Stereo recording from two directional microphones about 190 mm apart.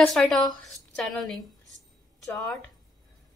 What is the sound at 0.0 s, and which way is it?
A woman's voice, centre (ahead or behind).